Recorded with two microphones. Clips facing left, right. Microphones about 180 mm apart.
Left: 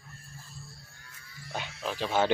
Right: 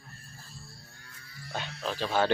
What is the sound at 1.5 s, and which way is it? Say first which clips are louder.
Music: even; 15° left (ahead or behind).